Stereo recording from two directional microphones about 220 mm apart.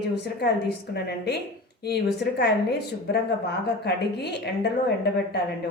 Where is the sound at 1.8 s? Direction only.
45° left (ahead or behind).